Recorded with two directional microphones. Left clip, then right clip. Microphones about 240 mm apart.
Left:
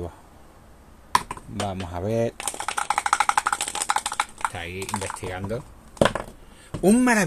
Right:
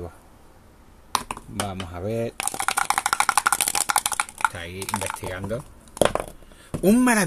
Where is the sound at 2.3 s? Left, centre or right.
Right.